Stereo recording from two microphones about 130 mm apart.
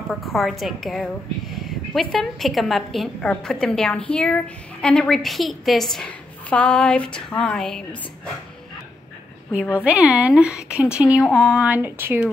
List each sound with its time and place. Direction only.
0.1 s a woman's voice: centre (ahead or behind)
9.8 s a woman's voice: 10° right (ahead or behind)